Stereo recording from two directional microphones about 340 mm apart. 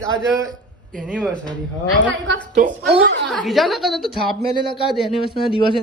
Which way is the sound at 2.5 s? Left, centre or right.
Right.